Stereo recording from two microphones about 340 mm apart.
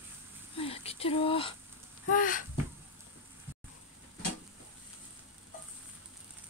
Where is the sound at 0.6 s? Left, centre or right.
Centre.